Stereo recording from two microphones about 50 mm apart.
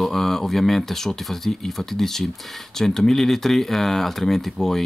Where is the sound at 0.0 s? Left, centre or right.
Centre.